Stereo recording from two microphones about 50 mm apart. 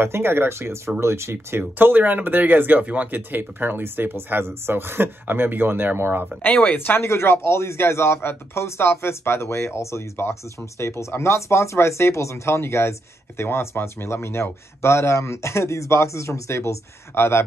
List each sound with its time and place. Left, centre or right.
0.0 s speech: right
1.6 s speech: right
6.4 s speech: left
7.0 s speech: left